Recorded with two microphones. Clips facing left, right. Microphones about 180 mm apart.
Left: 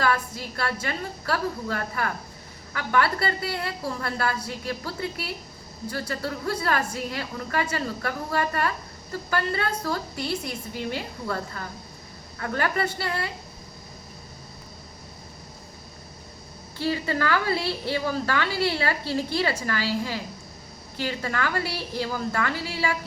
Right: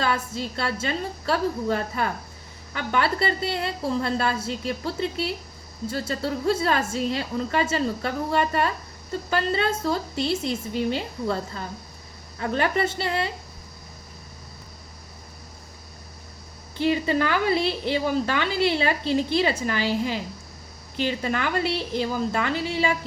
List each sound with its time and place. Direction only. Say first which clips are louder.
0.0 s a woman's voice: even; 25° right (ahead or behind)
16.7 s a woman's voice: right 4 dB; 20° right (ahead or behind)